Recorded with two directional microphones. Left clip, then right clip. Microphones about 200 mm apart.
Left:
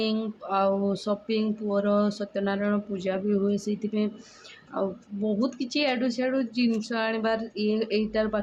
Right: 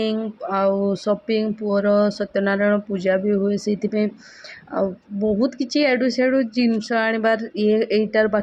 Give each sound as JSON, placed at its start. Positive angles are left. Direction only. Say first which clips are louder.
{"t": 0.0, "sound": "speech", "louder": "right 5 dB", "side_deg": -20}